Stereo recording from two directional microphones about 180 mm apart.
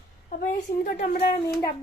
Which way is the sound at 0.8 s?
35° left (ahead or behind).